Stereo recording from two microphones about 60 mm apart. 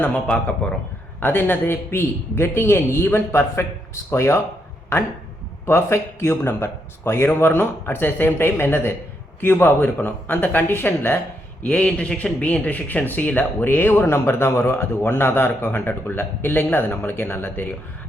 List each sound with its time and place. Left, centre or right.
0.0 s speech: left
1.2 s speech: left
5.6 s speech: left
11.6 s speech: left